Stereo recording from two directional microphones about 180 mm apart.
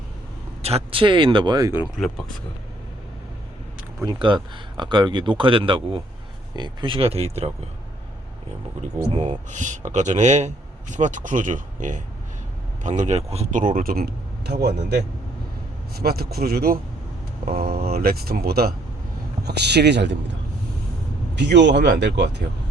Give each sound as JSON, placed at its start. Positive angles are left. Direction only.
{"t": 0.6, "sound": "speech", "side_deg": -35}
{"t": 4.0, "sound": "speech", "side_deg": -25}
{"t": 9.0, "sound": "a man's voice", "side_deg": -30}
{"t": 16.0, "sound": "speech", "side_deg": -60}
{"t": 21.3, "sound": "speech", "side_deg": -75}